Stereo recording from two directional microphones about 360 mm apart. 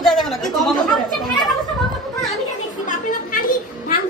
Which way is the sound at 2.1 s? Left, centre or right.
Centre.